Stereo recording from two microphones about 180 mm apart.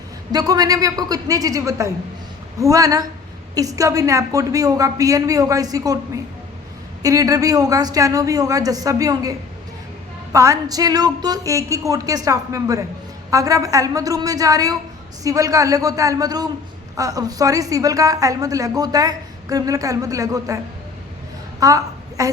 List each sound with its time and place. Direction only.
0.3 s a woman's voice: 20° right (ahead or behind)
7.0 s a woman's voice: 20° right (ahead or behind)
10.3 s a woman's voice: 20° right (ahead or behind)
21.6 s a woman's voice: 20° right (ahead or behind)